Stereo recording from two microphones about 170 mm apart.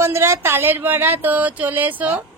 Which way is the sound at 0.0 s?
15° right (ahead or behind).